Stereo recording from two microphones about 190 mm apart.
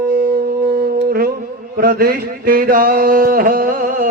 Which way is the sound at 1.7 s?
50° right (ahead or behind).